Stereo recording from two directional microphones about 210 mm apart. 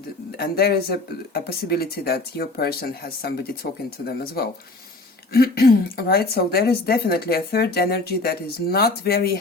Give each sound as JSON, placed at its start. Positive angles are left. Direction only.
{"t": 0.3, "sound": "speech", "side_deg": 50}